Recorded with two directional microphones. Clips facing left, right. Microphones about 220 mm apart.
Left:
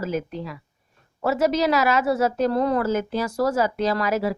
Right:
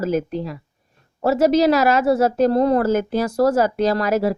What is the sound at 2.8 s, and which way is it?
Speech, 50° right (ahead or behind).